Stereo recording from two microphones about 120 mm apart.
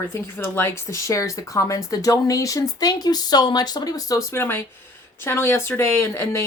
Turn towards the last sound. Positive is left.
turn(degrees=20)  # may be behind; listen again after turning